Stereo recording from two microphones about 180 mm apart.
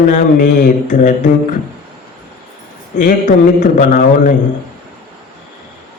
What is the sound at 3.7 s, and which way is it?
Speech, 45° left (ahead or behind).